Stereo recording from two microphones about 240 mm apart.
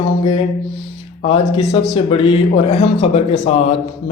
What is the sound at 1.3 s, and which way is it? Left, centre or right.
Speech, left.